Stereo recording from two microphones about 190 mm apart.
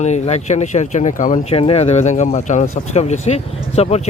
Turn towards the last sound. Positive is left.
turn(degrees=35)  # may be behind; listen again after turning